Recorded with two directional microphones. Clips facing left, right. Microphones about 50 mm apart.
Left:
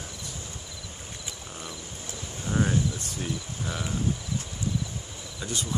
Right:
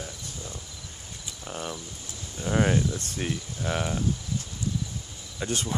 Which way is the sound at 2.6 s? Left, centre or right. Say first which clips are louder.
Right 2 dB; right.